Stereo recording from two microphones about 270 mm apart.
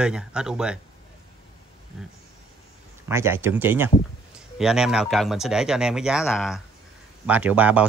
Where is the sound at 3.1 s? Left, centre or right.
Centre.